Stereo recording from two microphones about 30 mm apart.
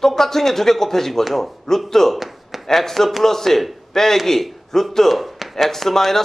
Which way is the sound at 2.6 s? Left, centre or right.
Centre.